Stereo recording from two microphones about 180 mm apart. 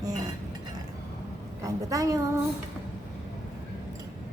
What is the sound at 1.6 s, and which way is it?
Child singing, 20° right (ahead or behind).